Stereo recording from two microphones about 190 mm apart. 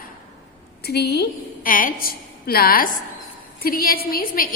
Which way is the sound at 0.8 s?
55° left (ahead or behind).